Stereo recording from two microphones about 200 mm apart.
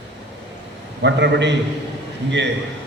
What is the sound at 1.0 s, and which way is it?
Speech, 60° right (ahead or behind).